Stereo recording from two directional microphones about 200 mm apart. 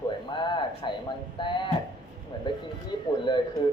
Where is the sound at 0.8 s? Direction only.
25° left (ahead or behind).